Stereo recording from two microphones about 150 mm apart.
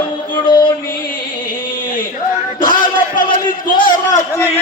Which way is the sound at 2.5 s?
65° left (ahead or behind).